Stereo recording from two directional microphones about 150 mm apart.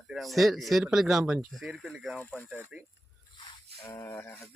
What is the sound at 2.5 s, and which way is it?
Speech, 15° right (ahead or behind).